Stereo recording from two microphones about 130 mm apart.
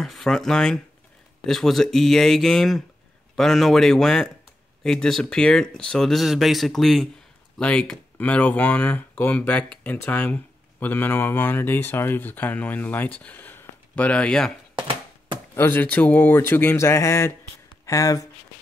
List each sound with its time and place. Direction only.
0.0 s speech: centre (ahead or behind)
15.5 s speech: 15° left (ahead or behind)